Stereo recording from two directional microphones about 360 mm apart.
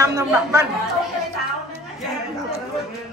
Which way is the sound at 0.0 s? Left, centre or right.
Centre.